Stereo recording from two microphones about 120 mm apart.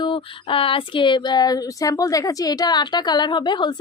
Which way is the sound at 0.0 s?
45° left (ahead or behind).